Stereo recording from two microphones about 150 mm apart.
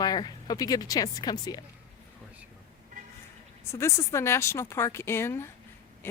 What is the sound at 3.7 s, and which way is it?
A woman's voice, 20° left (ahead or behind).